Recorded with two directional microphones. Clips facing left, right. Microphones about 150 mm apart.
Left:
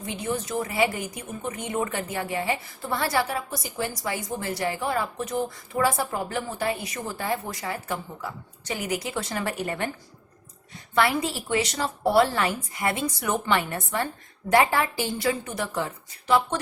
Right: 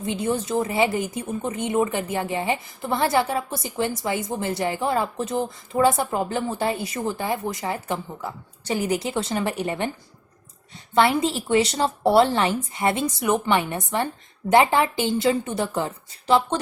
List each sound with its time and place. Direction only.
0.0 s a woman's voice: 30° right (ahead or behind)
10.9 s a woman's voice: 25° right (ahead or behind)